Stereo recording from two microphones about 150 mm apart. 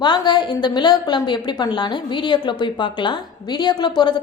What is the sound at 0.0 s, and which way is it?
A woman's voice, 30° left (ahead or behind).